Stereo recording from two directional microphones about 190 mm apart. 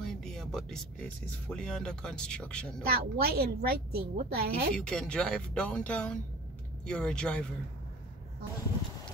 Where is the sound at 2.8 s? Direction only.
55° right (ahead or behind).